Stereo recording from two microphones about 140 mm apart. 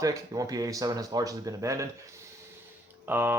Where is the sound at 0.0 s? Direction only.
25° right (ahead or behind).